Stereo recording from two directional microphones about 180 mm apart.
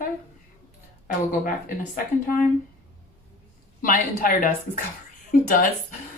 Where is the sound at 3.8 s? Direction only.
50° left (ahead or behind).